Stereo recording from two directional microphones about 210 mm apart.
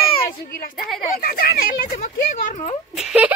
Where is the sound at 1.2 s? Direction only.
45° left (ahead or behind).